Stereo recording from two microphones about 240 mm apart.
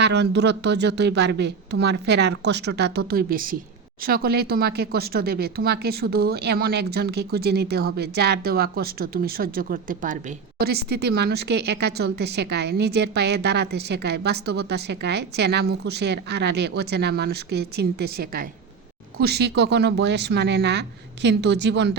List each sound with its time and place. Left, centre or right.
0.0 s a woman's voice: right